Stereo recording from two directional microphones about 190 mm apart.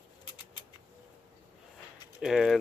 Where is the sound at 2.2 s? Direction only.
Centre (ahead or behind).